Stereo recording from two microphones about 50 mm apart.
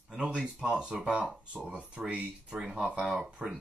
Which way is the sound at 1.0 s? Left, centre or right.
Centre.